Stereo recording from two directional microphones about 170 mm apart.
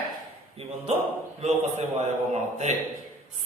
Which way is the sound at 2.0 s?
40° right (ahead or behind).